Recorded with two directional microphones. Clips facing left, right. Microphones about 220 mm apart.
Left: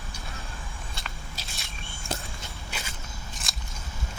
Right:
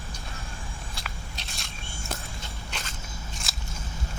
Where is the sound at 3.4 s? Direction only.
Centre (ahead or behind).